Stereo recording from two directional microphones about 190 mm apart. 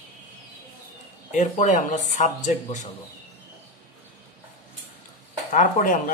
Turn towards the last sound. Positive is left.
turn(degrees=45)  # may be behind; listen again after turning